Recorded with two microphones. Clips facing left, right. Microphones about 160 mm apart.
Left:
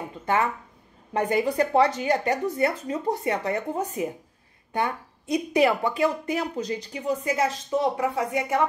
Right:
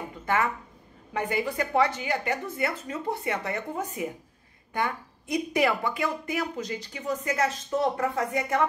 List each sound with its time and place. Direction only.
1.1 s a woman's voice: 35° left (ahead or behind)
7.0 s a woman's voice: 10° left (ahead or behind)